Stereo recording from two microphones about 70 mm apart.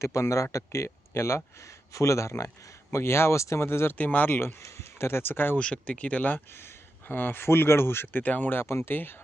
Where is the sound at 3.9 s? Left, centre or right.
Left.